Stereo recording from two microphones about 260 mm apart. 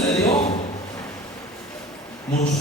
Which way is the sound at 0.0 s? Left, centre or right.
Centre.